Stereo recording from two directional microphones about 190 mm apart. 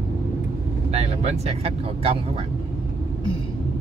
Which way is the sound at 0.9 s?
35° right (ahead or behind).